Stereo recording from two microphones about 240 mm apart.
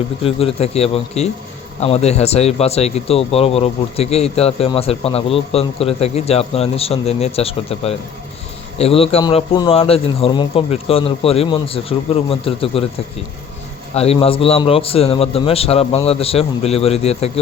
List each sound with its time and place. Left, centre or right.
0.2 s speech: left
13.9 s speech: left